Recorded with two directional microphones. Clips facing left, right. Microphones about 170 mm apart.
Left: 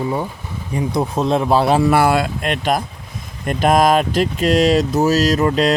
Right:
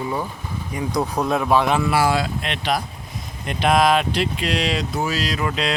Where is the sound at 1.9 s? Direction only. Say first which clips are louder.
Left 5 dB; 55° left (ahead or behind).